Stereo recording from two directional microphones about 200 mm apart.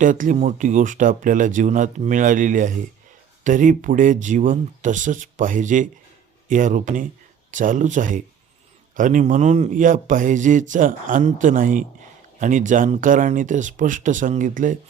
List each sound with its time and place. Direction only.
0.0 s speech: 40° right (ahead or behind)